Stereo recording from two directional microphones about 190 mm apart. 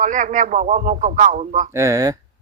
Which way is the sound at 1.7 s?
15° right (ahead or behind).